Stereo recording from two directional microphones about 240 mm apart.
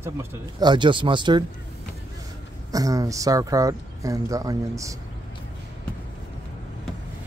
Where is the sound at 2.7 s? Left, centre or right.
Centre.